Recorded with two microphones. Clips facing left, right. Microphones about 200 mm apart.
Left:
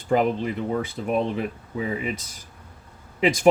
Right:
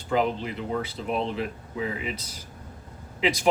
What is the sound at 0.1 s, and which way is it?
Speech, 50° left (ahead or behind).